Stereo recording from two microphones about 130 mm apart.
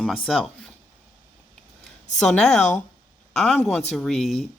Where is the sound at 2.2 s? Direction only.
5° left (ahead or behind).